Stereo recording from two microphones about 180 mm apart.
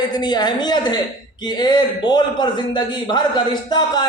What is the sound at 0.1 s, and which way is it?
A man's voice, 25° left (ahead or behind).